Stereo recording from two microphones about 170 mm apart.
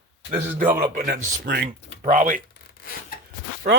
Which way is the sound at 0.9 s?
50° right (ahead or behind).